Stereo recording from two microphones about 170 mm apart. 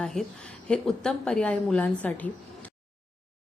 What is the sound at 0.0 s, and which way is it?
A woman's voice, 5° left (ahead or behind).